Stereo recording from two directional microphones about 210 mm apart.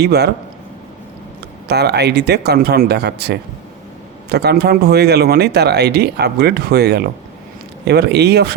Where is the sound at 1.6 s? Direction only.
50° right (ahead or behind).